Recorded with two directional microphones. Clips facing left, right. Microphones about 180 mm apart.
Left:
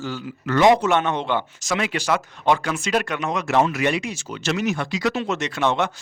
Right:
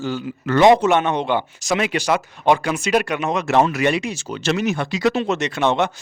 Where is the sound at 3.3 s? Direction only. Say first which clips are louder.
Right 3 dB; 25° right (ahead or behind).